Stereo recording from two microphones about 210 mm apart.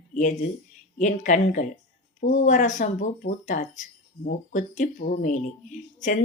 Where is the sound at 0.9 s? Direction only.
35° left (ahead or behind).